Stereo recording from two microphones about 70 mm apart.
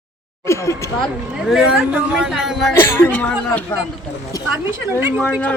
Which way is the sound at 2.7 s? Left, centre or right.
Left.